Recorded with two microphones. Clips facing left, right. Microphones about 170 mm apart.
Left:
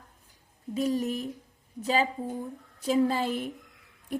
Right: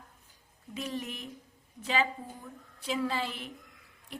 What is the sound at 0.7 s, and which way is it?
A woman's voice, 40° left (ahead or behind).